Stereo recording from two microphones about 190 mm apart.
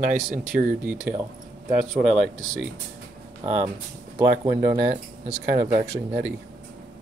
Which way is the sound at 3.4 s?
35° right (ahead or behind).